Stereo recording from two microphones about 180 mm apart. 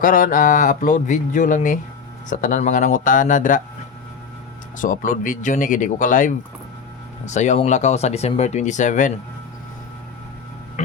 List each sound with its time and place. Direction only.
0.0 s speech: 45° left (ahead or behind)
4.8 s speech: 50° left (ahead or behind)
10.8 s a sound: 40° left (ahead or behind)